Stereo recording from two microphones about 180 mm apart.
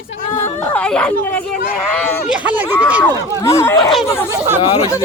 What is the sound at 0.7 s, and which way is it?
Speech, 5° left (ahead or behind).